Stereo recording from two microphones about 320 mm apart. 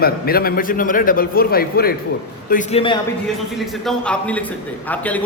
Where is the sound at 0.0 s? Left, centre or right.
Left.